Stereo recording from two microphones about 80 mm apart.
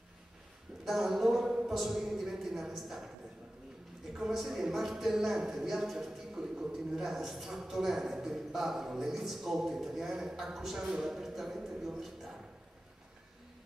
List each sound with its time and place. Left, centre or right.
0.8 s speech: centre
4.2 s speech: centre